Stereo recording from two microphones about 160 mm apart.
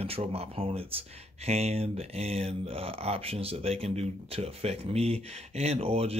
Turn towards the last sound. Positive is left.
turn(degrees=-40)  # may be behind; listen again after turning